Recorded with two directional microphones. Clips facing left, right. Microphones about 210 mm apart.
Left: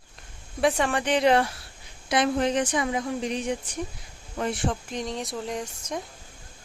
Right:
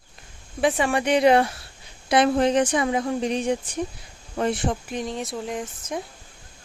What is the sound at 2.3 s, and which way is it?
Speech, 35° right (ahead or behind).